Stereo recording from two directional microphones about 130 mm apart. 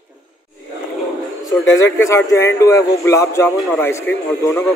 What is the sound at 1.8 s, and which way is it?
A man's voice, 20° left (ahead or behind).